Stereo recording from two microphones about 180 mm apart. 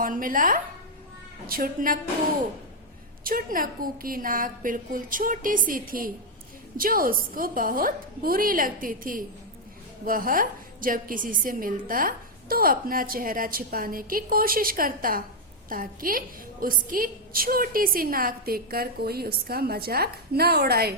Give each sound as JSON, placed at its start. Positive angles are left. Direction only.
{"t": 0.0, "sound": "a woman's voice", "side_deg": -50}
{"t": 3.2, "sound": "a woman's voice", "side_deg": -50}